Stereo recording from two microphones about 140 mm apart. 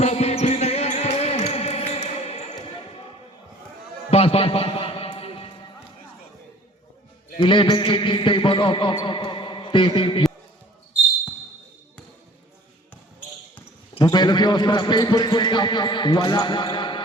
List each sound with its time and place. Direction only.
0.0 s music: 50° left (ahead or behind)
4.1 s music: 45° left (ahead or behind)
7.4 s a man's voice: 35° left (ahead or behind)
14.0 s a man's voice: 30° left (ahead or behind)